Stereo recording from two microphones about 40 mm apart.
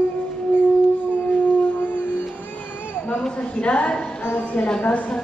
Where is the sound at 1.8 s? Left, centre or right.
Left.